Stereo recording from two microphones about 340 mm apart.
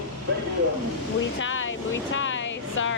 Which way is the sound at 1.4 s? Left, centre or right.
Left.